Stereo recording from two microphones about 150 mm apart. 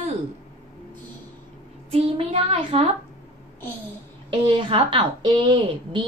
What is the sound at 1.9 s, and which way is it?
Speech, 40° right (ahead or behind).